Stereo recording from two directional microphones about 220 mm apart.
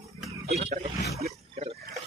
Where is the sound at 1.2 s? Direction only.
30° right (ahead or behind).